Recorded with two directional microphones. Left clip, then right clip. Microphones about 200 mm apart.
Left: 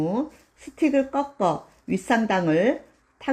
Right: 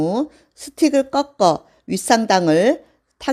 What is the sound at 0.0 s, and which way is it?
Speech, 25° right (ahead or behind).